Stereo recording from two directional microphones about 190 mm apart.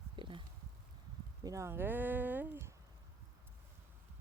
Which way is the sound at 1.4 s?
15° right (ahead or behind).